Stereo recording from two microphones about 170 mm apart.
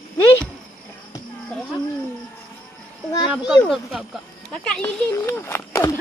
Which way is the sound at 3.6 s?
Centre (ahead or behind).